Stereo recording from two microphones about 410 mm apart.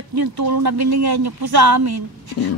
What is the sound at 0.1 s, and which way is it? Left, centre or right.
Speech, right.